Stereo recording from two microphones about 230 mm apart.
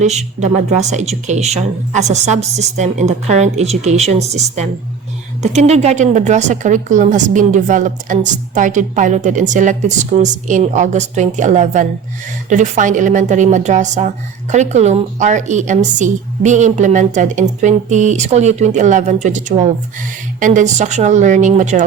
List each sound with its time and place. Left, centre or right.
0.0 s a woman's voice: right